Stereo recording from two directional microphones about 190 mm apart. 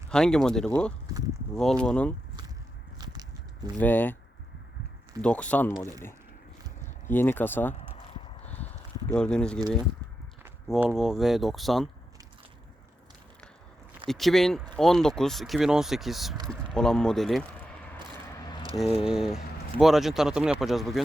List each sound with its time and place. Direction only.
0.1 s speech: 5° left (ahead or behind)
1.1 s speech: 20° right (ahead or behind)
1.5 s speech: 5° left (ahead or behind)
3.0 s walk: 20° right (ahead or behind)
3.8 s speech: 10° left (ahead or behind)
5.2 s speech: 5° left (ahead or behind)
9.1 s speech: 5° left (ahead or behind)
14.1 s speech: centre (ahead or behind)
19.0 s speech: centre (ahead or behind)